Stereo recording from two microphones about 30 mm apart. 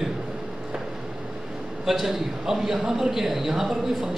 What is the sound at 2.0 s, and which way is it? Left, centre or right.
A man's voice, centre.